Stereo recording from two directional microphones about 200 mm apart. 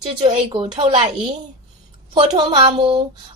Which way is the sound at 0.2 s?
25° right (ahead or behind).